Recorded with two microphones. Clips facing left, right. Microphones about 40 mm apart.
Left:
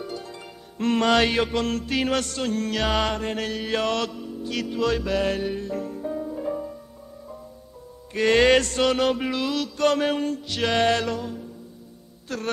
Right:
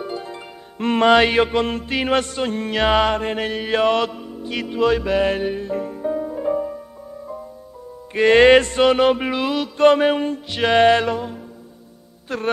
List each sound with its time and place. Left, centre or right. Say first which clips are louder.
0.0 s music: right 5 dB; right
8.1 s music: right 6 dB; right